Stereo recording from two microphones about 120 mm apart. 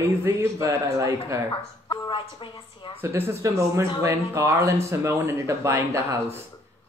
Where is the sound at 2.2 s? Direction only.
45° left (ahead or behind).